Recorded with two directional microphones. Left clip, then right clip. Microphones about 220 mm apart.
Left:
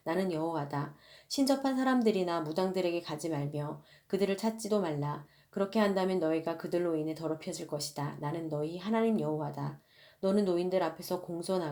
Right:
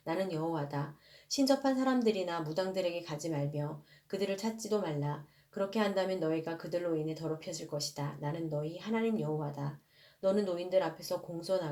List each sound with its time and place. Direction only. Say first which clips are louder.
0.0 s speech: left 2 dB; 35° left (ahead or behind)